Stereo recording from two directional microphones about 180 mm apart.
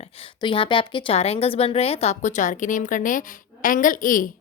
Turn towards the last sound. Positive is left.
turn(degrees=50)  # may be behind; listen again after turning